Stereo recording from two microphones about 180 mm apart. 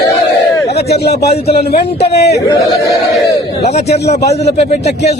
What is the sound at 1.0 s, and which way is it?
A man's voice, 60° left (ahead or behind).